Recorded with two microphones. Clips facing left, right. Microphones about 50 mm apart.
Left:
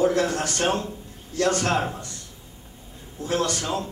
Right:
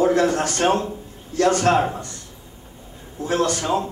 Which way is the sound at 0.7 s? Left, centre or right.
Centre.